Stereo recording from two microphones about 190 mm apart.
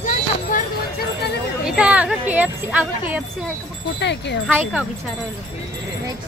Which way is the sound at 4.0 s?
65° left (ahead or behind).